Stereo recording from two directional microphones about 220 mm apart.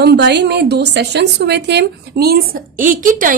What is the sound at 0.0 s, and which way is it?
A woman's voice, 50° right (ahead or behind).